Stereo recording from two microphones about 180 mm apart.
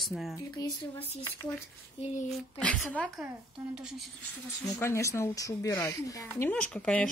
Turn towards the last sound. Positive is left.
turn(degrees=5)  # may be behind; listen again after turning